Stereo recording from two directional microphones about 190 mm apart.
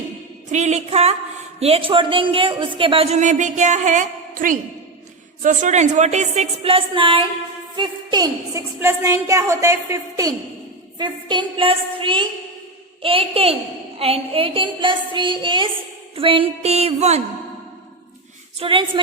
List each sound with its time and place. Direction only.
0.5 s a woman's voice: 35° right (ahead or behind)
18.6 s a woman's voice: 25° right (ahead or behind)